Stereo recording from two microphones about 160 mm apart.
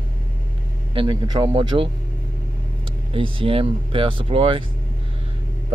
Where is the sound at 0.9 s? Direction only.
25° right (ahead or behind).